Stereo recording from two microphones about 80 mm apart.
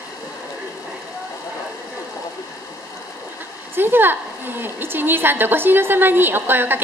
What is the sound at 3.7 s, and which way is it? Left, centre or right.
A woman's voice, right.